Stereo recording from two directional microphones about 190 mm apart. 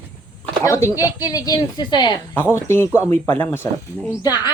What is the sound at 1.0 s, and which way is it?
A woman's voice, 20° left (ahead or behind).